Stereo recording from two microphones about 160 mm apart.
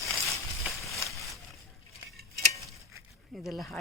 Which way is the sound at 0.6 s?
Centre (ahead or behind).